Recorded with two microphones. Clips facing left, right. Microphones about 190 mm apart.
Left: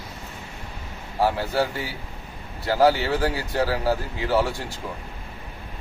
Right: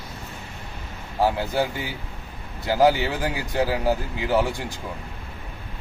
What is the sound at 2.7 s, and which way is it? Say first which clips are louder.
A man's voice: even; 15° right (ahead or behind).